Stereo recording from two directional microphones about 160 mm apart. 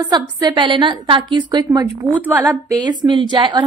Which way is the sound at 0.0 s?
25° right (ahead or behind).